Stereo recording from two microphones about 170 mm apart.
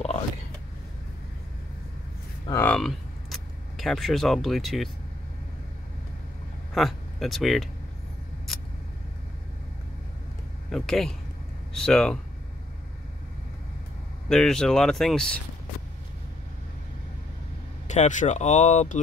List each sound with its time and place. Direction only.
2.5 s speech: 10° left (ahead or behind)
6.7 s speech: centre (ahead or behind)
8.5 s a sound: centre (ahead or behind)
10.7 s speech: 5° left (ahead or behind)
14.3 s speech: 5° left (ahead or behind)
17.8 s speech: 45° left (ahead or behind)